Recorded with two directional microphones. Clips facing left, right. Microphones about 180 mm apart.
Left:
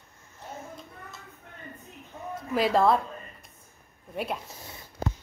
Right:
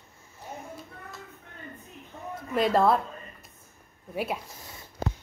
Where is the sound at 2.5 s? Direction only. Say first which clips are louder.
Even; centre (ahead or behind).